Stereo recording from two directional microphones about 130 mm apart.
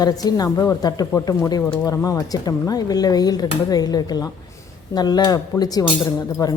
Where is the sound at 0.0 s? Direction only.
30° left (ahead or behind).